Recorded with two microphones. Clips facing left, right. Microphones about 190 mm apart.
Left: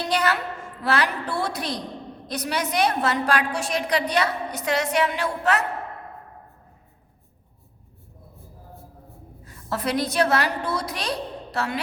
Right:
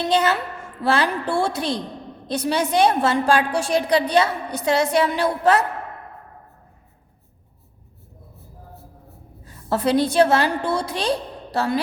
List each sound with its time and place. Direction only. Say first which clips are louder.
0.0 s a woman's voice: right 4 dB; 25° right (ahead or behind)
9.6 s a woman's voice: right 6 dB; 30° right (ahead or behind)